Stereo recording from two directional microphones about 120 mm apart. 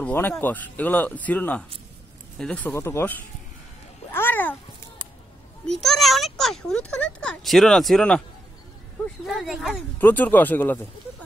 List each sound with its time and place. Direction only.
0.0 s speech: 15° left (ahead or behind)
2.3 s speech: 5° left (ahead or behind)
2.6 s speech: 20° left (ahead or behind)
4.1 s a sound: 15° left (ahead or behind)
5.8 s speech: centre (ahead or behind)
9.2 s speech: centre (ahead or behind)
9.9 s speech: 15° left (ahead or behind)